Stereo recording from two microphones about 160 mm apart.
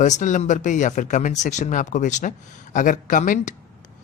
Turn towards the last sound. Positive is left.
turn(degrees=55)  # may be behind; listen again after turning